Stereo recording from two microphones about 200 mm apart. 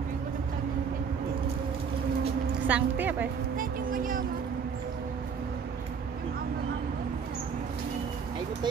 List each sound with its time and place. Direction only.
2.6 s speech: 10° right (ahead or behind)
3.5 s music: 45° right (ahead or behind)